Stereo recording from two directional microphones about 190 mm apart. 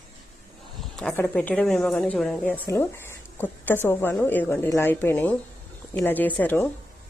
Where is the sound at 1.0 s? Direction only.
5° left (ahead or behind).